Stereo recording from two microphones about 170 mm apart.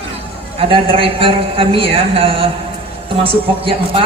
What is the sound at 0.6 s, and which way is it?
A man's voice, 30° right (ahead or behind).